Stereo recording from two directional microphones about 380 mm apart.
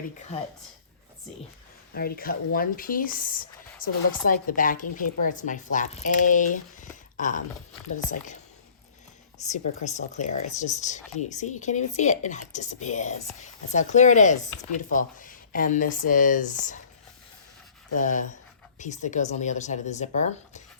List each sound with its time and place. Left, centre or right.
0.3 s speech: centre
1.9 s speech: left
9.5 s speech: centre
18.0 s speech: centre